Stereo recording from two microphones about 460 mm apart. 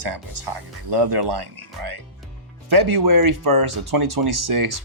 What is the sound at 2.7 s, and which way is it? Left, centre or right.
Speech, right.